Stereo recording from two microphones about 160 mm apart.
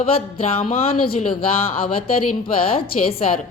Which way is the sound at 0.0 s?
35° left (ahead or behind).